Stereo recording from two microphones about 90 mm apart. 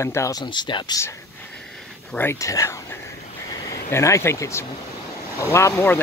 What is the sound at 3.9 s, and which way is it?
Speech, 30° left (ahead or behind).